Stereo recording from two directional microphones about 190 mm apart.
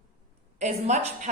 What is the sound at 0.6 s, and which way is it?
Speech, 35° right (ahead or behind).